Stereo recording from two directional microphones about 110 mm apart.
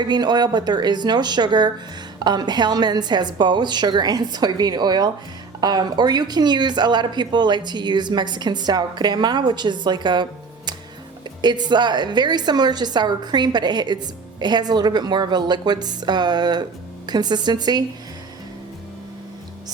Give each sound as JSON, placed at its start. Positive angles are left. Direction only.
{"t": 0.0, "sound": "a woman's voice", "side_deg": -40}
{"t": 11.4, "sound": "a woman's voice", "side_deg": -40}